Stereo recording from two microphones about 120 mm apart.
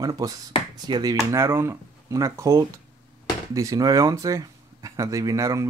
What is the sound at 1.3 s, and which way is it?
Speech, 20° right (ahead or behind).